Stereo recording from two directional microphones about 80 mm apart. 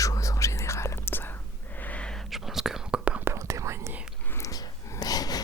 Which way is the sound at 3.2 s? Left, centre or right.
Right.